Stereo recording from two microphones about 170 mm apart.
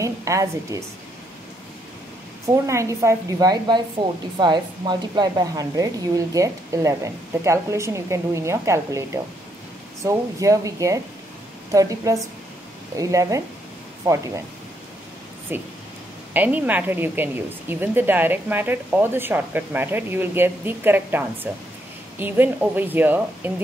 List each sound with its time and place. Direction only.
0.0 s speech: 20° right (ahead or behind)
2.4 s a woman's voice: 15° right (ahead or behind)
15.5 s a woman's voice: 10° right (ahead or behind)